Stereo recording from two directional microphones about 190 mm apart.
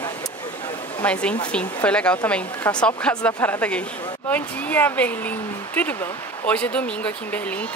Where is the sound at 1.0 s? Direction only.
5° left (ahead or behind).